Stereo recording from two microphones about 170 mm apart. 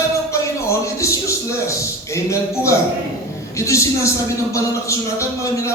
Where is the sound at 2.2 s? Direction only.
15° left (ahead or behind).